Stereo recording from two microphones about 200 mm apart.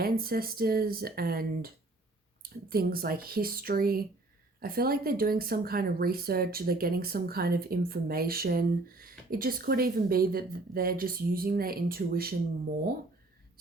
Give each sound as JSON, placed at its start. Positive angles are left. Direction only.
{"t": 0.0, "sound": "speech", "side_deg": -50}